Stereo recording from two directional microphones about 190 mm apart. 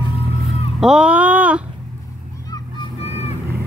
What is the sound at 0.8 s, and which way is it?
Speech, 5° right (ahead or behind).